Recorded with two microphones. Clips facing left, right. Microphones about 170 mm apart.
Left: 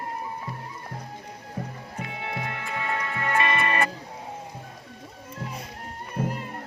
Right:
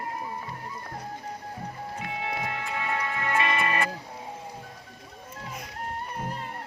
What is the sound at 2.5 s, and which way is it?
Music, 50° left (ahead or behind).